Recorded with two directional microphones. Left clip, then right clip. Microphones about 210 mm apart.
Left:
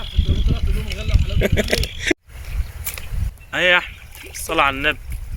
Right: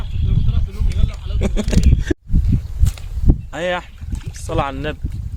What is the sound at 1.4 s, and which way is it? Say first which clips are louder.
Speech: left 4 dB; 50° right (ahead or behind).